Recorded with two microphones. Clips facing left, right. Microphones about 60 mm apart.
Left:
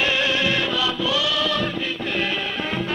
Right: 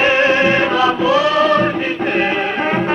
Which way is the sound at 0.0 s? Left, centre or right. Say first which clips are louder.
Right 9 dB; right.